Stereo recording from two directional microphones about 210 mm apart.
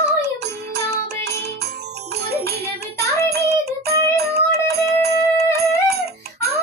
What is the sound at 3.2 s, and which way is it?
Music, 50° right (ahead or behind).